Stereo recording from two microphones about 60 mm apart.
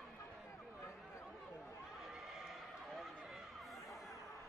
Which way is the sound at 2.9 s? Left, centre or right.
Centre.